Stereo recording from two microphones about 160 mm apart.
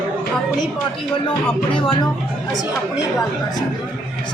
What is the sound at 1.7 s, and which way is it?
Speech, 30° left (ahead or behind).